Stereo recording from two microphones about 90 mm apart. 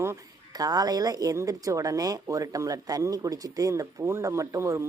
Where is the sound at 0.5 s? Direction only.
45° right (ahead or behind).